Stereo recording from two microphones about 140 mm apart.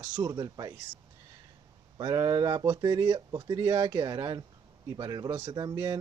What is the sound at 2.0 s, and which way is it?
Speech, 30° right (ahead or behind).